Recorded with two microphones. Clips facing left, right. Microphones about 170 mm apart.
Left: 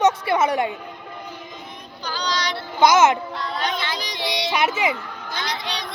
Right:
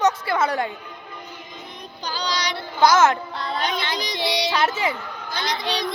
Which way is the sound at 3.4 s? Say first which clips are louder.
Even; 25° right (ahead or behind).